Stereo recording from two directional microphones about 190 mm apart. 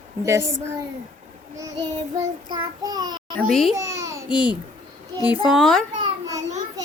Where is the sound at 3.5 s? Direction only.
Centre (ahead or behind).